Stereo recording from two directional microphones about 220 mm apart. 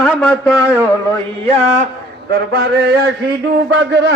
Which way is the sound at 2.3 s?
45° right (ahead or behind).